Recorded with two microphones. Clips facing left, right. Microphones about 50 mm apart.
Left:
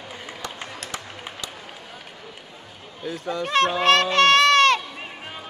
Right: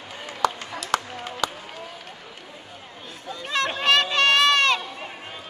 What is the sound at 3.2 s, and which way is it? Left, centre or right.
Speech, left.